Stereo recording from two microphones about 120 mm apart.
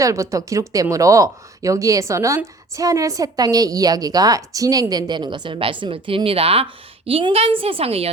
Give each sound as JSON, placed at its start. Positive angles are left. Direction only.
{"t": 0.0, "sound": "a woman's voice", "side_deg": -25}